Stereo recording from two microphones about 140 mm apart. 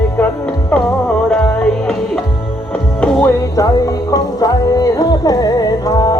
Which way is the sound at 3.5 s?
25° left (ahead or behind).